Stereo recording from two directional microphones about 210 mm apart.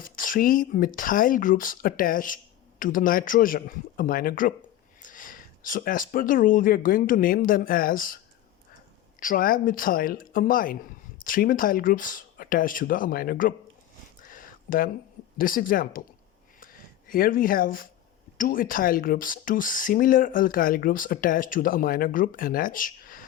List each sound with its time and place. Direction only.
0.0 s speech: 40° left (ahead or behind)
9.2 s speech: 40° left (ahead or behind)
14.3 s a sound: 40° left (ahead or behind)
15.4 s speech: 40° left (ahead or behind)
17.1 s speech: 40° left (ahead or behind)